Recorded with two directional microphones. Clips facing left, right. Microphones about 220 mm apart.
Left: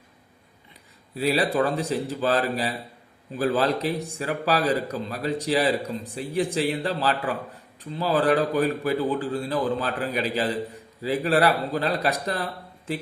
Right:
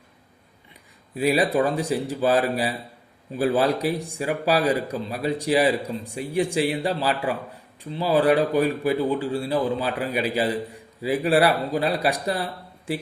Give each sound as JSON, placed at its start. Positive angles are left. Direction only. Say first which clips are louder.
{"t": 1.1, "sound": "speech", "louder": "right 2 dB", "side_deg": -15}